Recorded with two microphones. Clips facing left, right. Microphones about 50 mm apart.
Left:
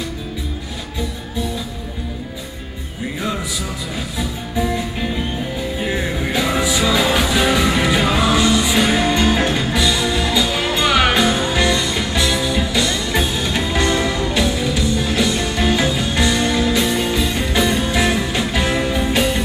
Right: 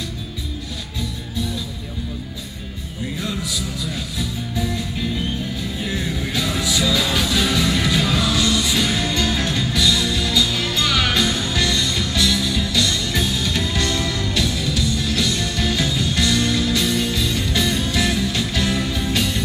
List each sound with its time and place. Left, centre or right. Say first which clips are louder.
4.2 s music: left 4 dB; left